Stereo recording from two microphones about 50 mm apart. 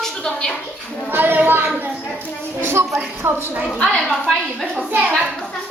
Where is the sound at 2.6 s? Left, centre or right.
Right.